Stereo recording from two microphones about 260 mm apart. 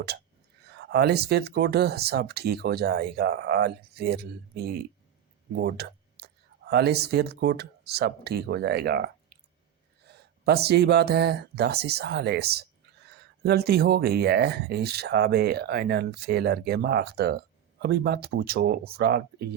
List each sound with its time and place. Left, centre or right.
0.7 s speech: right